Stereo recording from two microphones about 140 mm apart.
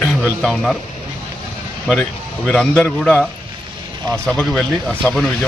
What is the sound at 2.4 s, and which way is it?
Speech, 5° left (ahead or behind).